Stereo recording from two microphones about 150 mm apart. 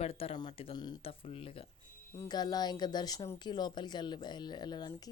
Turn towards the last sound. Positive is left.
turn(degrees=30)  # may be behind; listen again after turning